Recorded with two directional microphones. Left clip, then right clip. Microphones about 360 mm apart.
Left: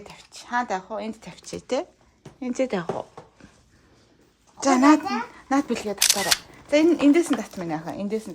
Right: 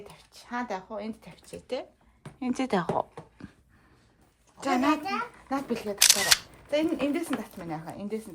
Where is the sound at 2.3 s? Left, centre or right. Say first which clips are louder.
Left 3 dB; centre.